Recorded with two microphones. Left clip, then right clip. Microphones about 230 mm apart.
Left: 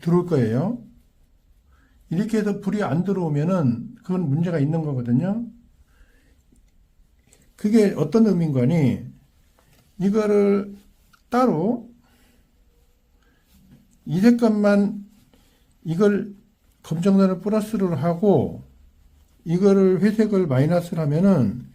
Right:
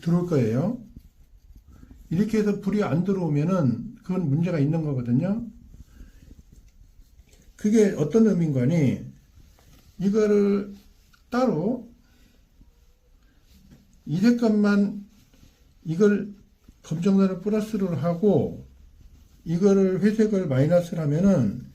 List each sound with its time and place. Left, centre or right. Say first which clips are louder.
0.0 s a man's voice: left 3 dB; left
2.0 s a man's voice: even; left
7.5 s a man's voice: left 2 dB; left
10.0 s a man's voice: left 2 dB; left
11.1 s a sound: left 5 dB; left
14.1 s a man's voice: left 4 dB; left
15.9 s a man's voice: left 1 dB; left
19.5 s a man's voice: left 4 dB; left